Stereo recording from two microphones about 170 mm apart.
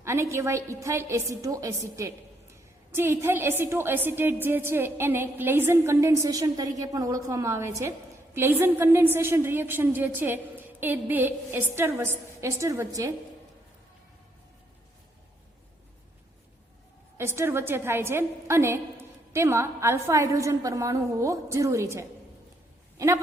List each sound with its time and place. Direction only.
0.0 s a woman's voice: 15° right (ahead or behind)
17.2 s a woman's voice: 15° right (ahead or behind)